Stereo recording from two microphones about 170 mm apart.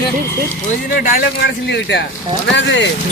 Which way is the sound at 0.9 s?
55° left (ahead or behind).